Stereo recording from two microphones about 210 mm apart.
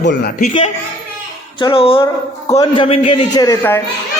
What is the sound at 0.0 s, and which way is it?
Speech, 55° left (ahead or behind).